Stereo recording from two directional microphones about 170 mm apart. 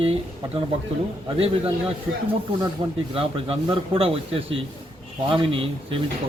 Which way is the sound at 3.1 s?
35° right (ahead or behind).